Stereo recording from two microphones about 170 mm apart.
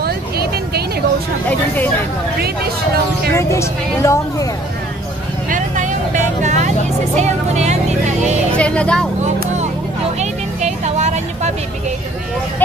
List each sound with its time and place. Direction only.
0.0 s vehicle: 65° right (ahead or behind)
3.3 s a woman's voice: 15° left (ahead or behind)
5.5 s vehicle: 45° right (ahead or behind)
7.2 s speech: 45° right (ahead or behind)
8.5 s a woman's voice: 5° left (ahead or behind)
10.6 s vehicle: 40° right (ahead or behind)